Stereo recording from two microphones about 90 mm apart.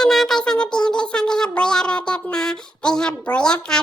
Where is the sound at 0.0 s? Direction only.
5° left (ahead or behind).